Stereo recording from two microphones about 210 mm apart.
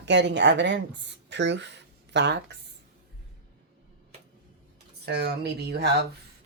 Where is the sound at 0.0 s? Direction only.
55° right (ahead or behind).